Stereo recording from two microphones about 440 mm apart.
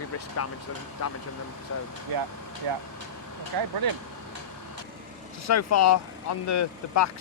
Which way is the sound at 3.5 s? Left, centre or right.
Right.